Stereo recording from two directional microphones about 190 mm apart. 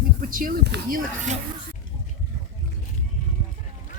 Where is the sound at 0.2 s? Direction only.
45° right (ahead or behind).